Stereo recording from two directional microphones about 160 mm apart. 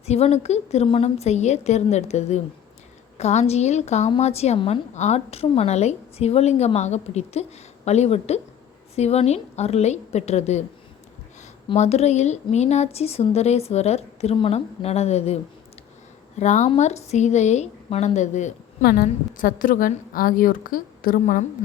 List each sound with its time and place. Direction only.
0.0 s a woman's voice: 40° left (ahead or behind)
11.7 s speech: 40° left (ahead or behind)
16.4 s a woman's voice: 45° left (ahead or behind)
18.8 s a woman's voice: 65° left (ahead or behind)